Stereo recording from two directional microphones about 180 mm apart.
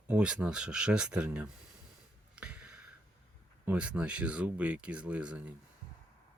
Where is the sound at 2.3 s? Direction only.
5° right (ahead or behind).